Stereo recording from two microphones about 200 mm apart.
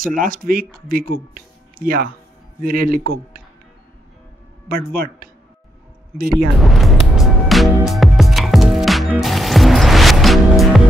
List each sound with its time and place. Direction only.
0.0 s speech: 45° right (ahead or behind)
4.6 s speech: 45° right (ahead or behind)
6.6 s speech: centre (ahead or behind)
7.4 s music: centre (ahead or behind)